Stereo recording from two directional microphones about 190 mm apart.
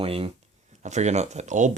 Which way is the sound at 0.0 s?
30° right (ahead or behind).